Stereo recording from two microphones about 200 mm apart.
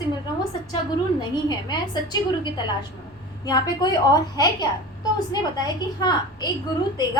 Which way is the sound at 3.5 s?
20° left (ahead or behind).